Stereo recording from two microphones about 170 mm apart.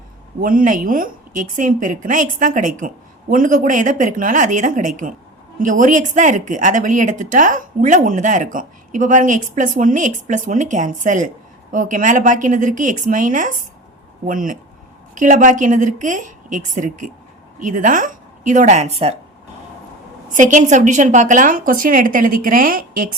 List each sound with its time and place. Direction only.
0.4 s a woman's voice: 55° right (ahead or behind); by 19.2 s 40° right (ahead or behind)
20.3 s a woman's voice: 50° right (ahead or behind)